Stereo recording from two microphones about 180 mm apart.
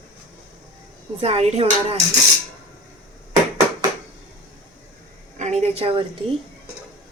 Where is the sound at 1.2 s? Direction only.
35° right (ahead or behind).